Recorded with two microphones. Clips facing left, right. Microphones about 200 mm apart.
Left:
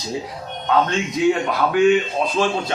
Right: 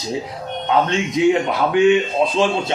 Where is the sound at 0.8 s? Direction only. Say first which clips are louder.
Right 2 dB; 25° right (ahead or behind).